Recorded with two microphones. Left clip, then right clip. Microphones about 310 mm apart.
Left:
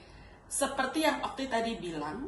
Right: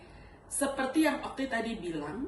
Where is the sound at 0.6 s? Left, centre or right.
Centre.